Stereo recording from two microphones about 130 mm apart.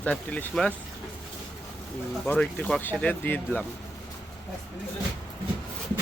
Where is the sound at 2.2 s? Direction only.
10° left (ahead or behind).